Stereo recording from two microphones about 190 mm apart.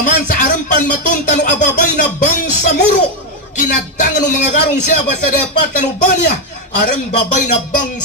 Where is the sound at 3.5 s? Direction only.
40° left (ahead or behind).